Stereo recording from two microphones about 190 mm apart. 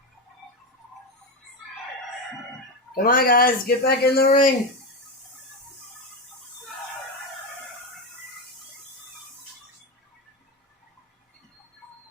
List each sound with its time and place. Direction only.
2.9 s speech: 50° left (ahead or behind)